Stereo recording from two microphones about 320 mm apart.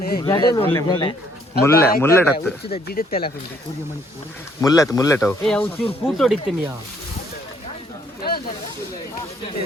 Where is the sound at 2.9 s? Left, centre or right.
Left.